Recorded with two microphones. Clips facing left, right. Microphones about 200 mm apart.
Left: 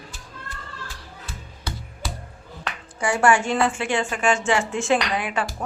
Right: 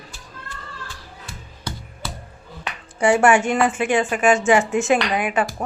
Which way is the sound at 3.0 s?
25° right (ahead or behind).